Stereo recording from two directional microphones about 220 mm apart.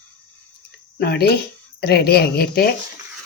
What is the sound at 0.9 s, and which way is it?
A woman's voice, 45° left (ahead or behind).